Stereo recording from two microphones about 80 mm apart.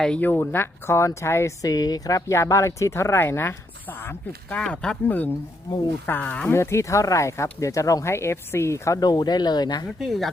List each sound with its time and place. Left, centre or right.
0.2 s speech: left
1.6 s speech: left; by 6.5 s centre
6.5 s speech: left
9.0 s speech: left
10.0 s speech: centre